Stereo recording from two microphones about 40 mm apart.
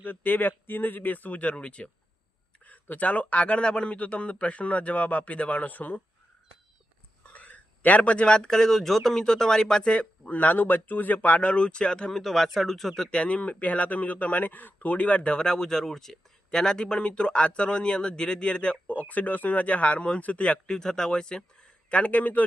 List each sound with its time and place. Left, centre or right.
0.0 s speech: left
2.9 s a man's voice: left
7.3 s speech: left
10.2 s a man's voice: left
12.1 s speech: centre
13.1 s a man's voice: left
20.7 s speech: centre
21.8 s a man's voice: left